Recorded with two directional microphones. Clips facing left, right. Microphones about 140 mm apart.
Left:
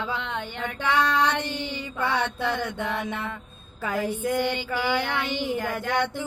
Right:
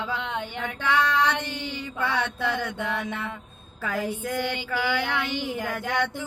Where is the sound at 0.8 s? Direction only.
15° left (ahead or behind).